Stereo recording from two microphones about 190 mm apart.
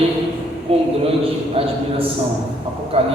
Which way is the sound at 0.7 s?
30° right (ahead or behind).